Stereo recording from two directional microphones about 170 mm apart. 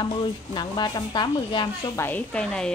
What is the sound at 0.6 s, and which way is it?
Speech, 25° left (ahead or behind).